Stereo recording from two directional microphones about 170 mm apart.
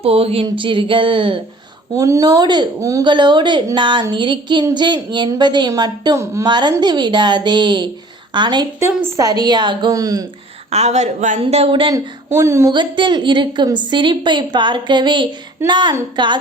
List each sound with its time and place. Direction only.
0.0 s a woman's voice: 35° right (ahead or behind)
2.0 s a woman's voice: 20° right (ahead or behind)
10.7 s speech: 40° right (ahead or behind); by 12.7 s 15° right (ahead or behind)
12.7 s a woman's voice: 25° right (ahead or behind)